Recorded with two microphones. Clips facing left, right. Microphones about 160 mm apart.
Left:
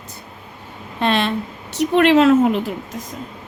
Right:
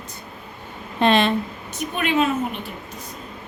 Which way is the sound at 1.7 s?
80° left.